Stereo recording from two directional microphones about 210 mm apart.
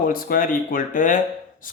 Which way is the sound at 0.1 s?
45° left (ahead or behind).